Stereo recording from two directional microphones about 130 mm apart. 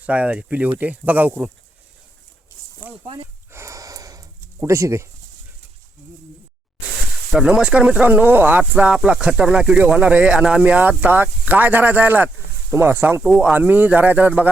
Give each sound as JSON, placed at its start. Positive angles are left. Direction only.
{"t": 0.0, "sound": "speech", "side_deg": -10}
{"t": 3.5, "sound": "a sound", "side_deg": -20}
{"t": 7.3, "sound": "speech", "side_deg": -5}
{"t": 13.2, "sound": "speech", "side_deg": -5}